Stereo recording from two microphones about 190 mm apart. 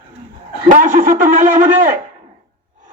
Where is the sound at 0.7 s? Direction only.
45° right (ahead or behind).